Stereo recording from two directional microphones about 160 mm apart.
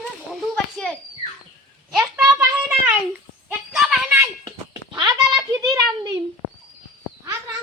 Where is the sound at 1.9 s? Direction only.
5° right (ahead or behind).